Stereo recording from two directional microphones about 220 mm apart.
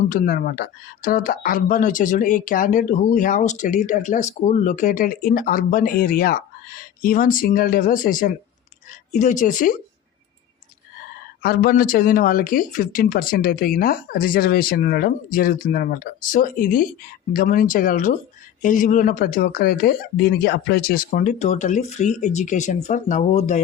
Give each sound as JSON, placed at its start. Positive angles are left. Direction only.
{"t": 0.0, "sound": "speech", "side_deg": 40}
{"t": 11.4, "sound": "speech", "side_deg": 45}